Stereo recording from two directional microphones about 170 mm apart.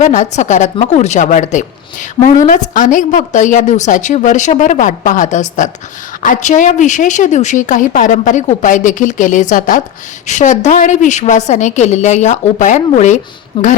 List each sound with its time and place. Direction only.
0.0 s a woman's voice: 45° left (ahead or behind)
13.5 s speech: 30° left (ahead or behind)